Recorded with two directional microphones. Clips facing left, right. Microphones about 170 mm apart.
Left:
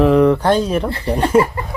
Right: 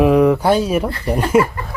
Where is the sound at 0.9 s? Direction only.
25° left (ahead or behind).